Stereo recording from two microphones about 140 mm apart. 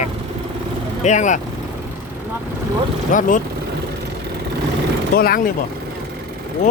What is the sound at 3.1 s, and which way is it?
Speech, 70° left (ahead or behind).